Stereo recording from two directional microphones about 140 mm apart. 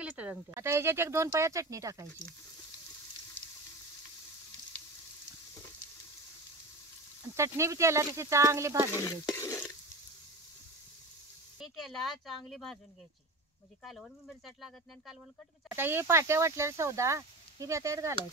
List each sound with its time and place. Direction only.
0.0 s speech: 10° right (ahead or behind)
7.3 s speech: 20° right (ahead or behind)
8.9 s stir: 20° left (ahead or behind)
11.6 s speech: centre (ahead or behind)
13.8 s speech: centre (ahead or behind)
15.7 s speech: 15° right (ahead or behind)